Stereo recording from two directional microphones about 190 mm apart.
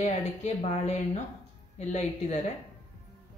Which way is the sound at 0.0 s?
35° left (ahead or behind).